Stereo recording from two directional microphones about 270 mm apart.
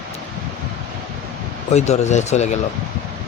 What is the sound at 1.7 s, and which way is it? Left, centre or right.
Speech, left.